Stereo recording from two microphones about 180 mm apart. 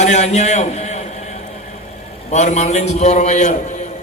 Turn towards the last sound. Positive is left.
turn(degrees=40)  # may be behind; listen again after turning